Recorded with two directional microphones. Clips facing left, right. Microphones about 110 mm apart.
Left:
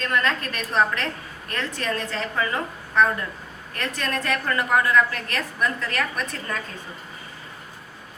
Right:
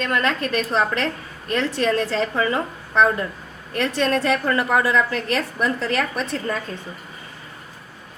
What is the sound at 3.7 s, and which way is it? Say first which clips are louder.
A woman's voice: right 8 dB; 30° right (ahead or behind).